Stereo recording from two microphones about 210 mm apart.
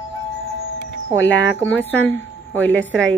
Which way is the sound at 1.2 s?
60° left (ahead or behind).